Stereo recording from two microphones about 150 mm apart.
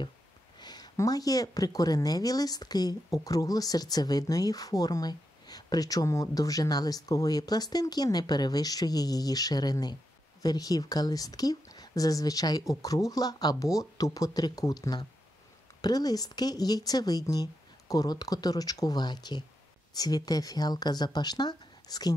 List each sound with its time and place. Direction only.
0.6 s speech: 25° left (ahead or behind)